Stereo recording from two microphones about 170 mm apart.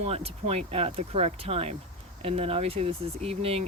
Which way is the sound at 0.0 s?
35° right (ahead or behind).